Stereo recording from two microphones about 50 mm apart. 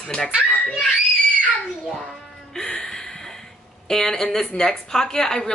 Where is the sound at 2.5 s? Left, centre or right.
Centre.